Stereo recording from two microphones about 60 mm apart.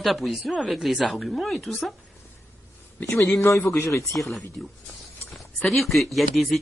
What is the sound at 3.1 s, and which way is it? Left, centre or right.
Speech, centre.